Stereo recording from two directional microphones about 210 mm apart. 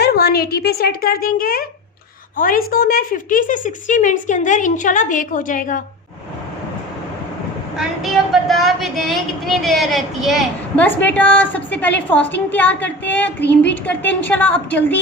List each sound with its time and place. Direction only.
0.0 s a child's voice: 50° left (ahead or behind)
7.8 s a woman's voice: centre (ahead or behind)